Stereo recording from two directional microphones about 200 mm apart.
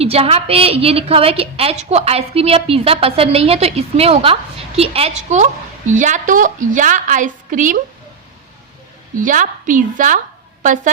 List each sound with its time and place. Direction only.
0.0 s a woman's voice: 30° right (ahead or behind)
9.1 s a woman's voice: 40° right (ahead or behind)